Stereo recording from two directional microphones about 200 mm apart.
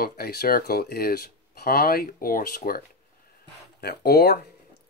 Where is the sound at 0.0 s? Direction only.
50° left (ahead or behind).